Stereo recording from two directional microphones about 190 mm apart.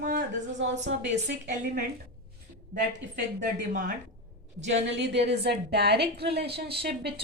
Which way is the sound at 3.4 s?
40° right (ahead or behind).